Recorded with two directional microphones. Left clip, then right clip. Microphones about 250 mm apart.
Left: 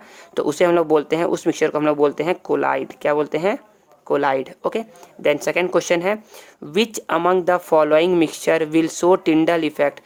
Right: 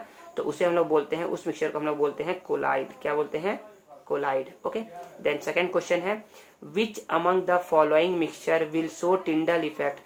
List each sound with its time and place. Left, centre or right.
0.3 s speech: left